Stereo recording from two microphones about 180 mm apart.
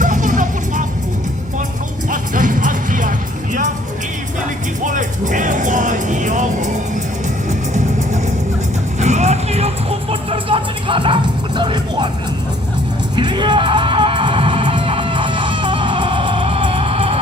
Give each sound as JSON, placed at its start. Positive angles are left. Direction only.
{"t": 0.0, "sound": "vehicle", "side_deg": -45}
{"t": 2.0, "sound": "music", "side_deg": -45}
{"t": 7.7, "sound": "music", "side_deg": -40}
{"t": 13.1, "sound": "music", "side_deg": -25}